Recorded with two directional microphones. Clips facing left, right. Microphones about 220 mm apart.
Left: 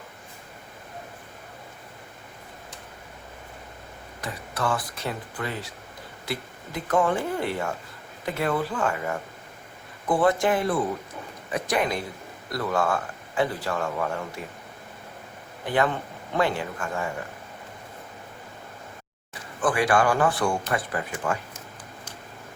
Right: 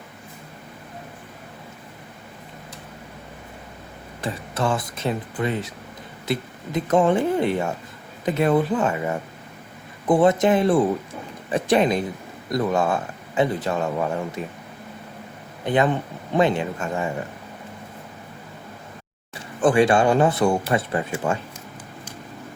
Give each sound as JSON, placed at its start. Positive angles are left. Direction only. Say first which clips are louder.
{"t": 4.2, "sound": "speech", "louder": "right 5 dB", "side_deg": -25}
{"t": 15.6, "sound": "speech", "louder": "right 4 dB", "side_deg": -20}
{"t": 19.3, "sound": "speech", "louder": "right 7 dB", "side_deg": -25}